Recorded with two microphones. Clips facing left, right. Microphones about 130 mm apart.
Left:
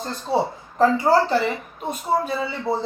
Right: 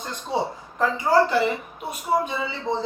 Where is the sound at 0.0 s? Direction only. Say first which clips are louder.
Left 4 dB; 35° left (ahead or behind).